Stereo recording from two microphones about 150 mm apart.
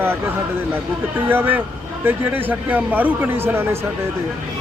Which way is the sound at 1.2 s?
15° right (ahead or behind).